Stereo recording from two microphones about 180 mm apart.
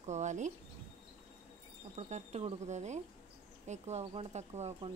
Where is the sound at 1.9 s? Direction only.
40° right (ahead or behind).